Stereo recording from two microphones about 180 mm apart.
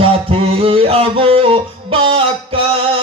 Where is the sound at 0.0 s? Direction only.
30° right (ahead or behind).